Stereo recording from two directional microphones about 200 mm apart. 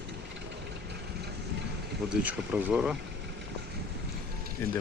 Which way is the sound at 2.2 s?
5° right (ahead or behind).